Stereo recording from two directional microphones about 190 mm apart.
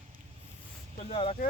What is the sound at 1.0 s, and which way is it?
Speech, 30° left (ahead or behind).